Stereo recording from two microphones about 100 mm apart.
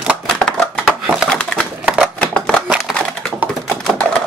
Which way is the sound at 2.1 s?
10° left (ahead or behind).